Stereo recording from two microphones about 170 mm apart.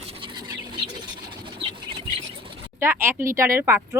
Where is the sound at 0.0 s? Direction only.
30° right (ahead or behind).